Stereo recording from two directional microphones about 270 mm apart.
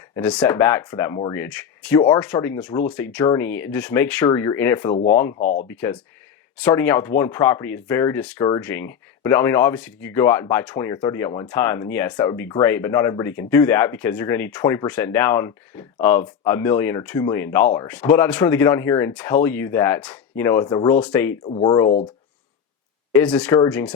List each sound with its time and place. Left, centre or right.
0.2 s speech: centre
21.4 s speech: centre
23.1 s speech: centre